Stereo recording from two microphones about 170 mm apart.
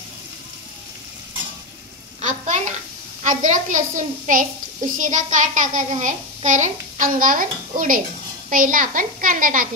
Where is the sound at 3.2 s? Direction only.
50° right (ahead or behind).